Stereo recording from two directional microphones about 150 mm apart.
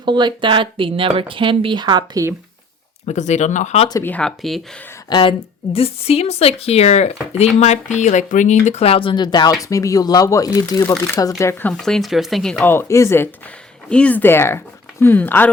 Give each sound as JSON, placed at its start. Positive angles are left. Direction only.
{"t": 0.0, "sound": "speech", "side_deg": -30}
{"t": 3.1, "sound": "speech", "side_deg": 50}
{"t": 4.0, "sound": "speech", "side_deg": 10}
{"t": 5.0, "sound": "speech", "side_deg": 30}
{"t": 5.7, "sound": "speech", "side_deg": 40}
{"t": 11.8, "sound": "speech", "side_deg": 0}
{"t": 12.6, "sound": "speech", "side_deg": 20}